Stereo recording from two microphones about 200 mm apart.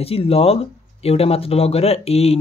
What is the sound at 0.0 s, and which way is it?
Speech, 30° left (ahead or behind).